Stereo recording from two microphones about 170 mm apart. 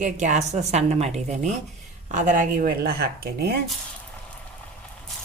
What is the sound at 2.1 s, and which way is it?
Speech, 45° right (ahead or behind).